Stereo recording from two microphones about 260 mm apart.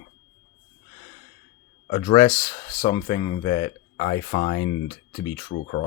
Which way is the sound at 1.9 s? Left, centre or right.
Left.